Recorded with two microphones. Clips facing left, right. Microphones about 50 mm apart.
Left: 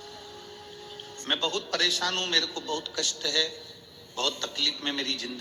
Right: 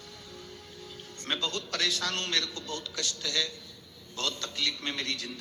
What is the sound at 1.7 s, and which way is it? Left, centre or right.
A man's voice, left.